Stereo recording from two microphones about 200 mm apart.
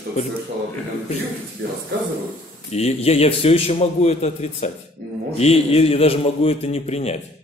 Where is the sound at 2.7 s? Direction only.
30° left (ahead or behind).